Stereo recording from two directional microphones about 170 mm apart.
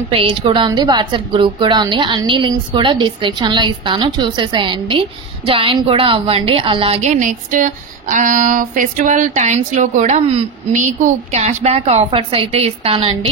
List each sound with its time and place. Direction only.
0.1 s a woman's voice: 30° right (ahead or behind)